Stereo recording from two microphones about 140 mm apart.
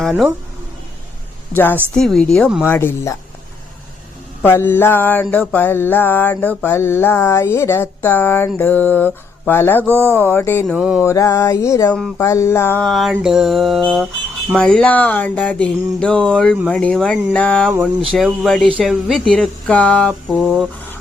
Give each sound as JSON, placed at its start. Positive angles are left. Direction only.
{"t": 1.5, "sound": "mantra", "side_deg": 15}
{"t": 2.0, "sound": "speech", "side_deg": 5}
{"t": 2.6, "sound": "mantra", "side_deg": 15}
{"t": 4.4, "sound": "mantra", "side_deg": 15}
{"t": 9.9, "sound": "speech", "side_deg": -15}
{"t": 10.2, "sound": "mantra", "side_deg": 15}
{"t": 10.8, "sound": "speech", "side_deg": -5}
{"t": 11.0, "sound": "a sound", "side_deg": 25}
{"t": 11.9, "sound": "speech", "side_deg": 5}
{"t": 12.2, "sound": "a sound", "side_deg": 20}
{"t": 12.8, "sound": "speech", "side_deg": 0}
{"t": 14.6, "sound": "mantra", "side_deg": 5}
{"t": 18.1, "sound": "speech", "side_deg": -10}
{"t": 18.4, "sound": "speech", "side_deg": 5}